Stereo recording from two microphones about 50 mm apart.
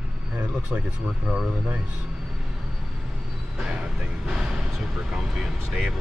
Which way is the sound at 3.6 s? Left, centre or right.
Right.